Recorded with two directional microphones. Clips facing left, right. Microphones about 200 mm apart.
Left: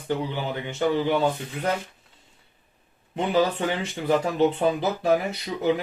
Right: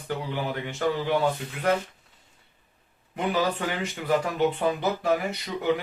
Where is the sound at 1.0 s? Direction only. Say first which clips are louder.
Right 1 dB; 20° left (ahead or behind).